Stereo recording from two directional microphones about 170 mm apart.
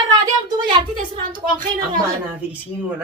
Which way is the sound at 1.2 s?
50° right (ahead or behind).